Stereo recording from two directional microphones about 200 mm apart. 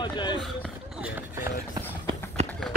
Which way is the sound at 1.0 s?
5° right (ahead or behind).